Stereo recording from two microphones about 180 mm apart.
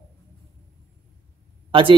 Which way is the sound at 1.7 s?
30° right (ahead or behind).